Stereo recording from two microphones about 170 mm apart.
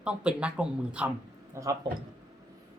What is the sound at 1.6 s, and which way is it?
Speech, 15° right (ahead or behind).